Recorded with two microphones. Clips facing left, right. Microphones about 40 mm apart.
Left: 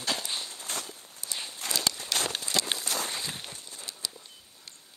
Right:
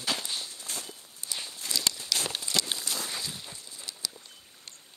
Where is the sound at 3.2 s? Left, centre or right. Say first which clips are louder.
Left 2 dB; left.